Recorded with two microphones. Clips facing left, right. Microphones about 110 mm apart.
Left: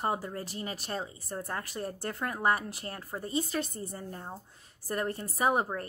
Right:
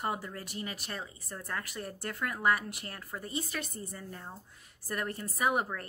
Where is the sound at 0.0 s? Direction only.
30° left (ahead or behind).